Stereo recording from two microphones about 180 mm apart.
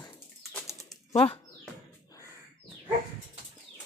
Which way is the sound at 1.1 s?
30° left (ahead or behind).